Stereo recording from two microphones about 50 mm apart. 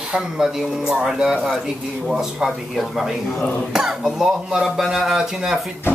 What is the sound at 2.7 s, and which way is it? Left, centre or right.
Speech, centre.